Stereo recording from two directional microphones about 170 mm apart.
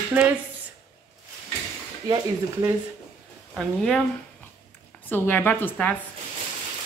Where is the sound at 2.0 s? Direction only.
25° right (ahead or behind).